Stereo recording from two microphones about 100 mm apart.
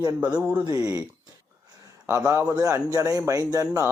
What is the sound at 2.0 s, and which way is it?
A man's voice, 25° right (ahead or behind).